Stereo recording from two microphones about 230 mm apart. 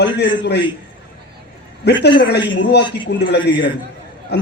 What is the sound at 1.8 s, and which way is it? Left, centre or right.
Speech, left.